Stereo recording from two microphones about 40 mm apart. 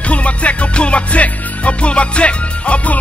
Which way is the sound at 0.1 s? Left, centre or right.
Left.